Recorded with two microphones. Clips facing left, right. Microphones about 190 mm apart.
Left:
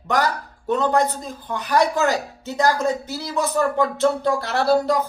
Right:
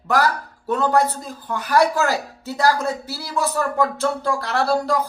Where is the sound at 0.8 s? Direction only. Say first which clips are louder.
Right 2 dB; 20° left (ahead or behind).